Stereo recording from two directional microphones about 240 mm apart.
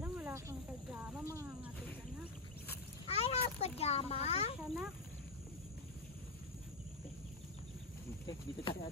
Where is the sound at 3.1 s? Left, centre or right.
Left.